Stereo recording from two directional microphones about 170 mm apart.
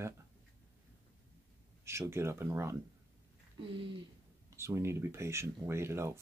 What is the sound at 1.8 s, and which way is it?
Speech, 15° right (ahead or behind).